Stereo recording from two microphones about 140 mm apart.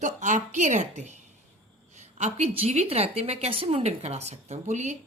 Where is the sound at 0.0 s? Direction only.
60° right (ahead or behind).